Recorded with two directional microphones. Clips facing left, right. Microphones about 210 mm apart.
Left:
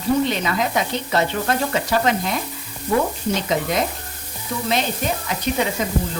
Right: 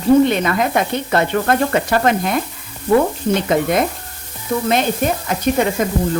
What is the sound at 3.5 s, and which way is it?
Sizzle, 55° right (ahead or behind).